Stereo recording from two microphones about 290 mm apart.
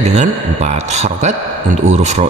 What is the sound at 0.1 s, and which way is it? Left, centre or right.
Speech, right.